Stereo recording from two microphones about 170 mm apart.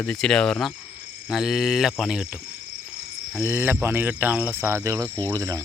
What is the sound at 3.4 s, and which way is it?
Speech, 15° right (ahead or behind).